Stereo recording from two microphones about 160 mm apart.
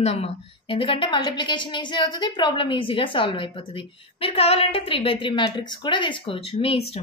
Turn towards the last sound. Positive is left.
turn(degrees=35)  # may be behind; listen again after turning